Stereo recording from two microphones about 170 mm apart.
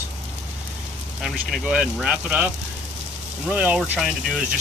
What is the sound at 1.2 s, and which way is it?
Speech, centre (ahead or behind).